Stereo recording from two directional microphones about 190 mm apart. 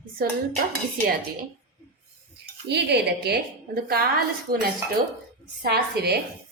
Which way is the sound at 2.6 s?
60° right (ahead or behind).